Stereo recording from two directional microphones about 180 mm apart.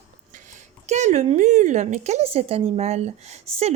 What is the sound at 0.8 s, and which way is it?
Speech, 40° right (ahead or behind).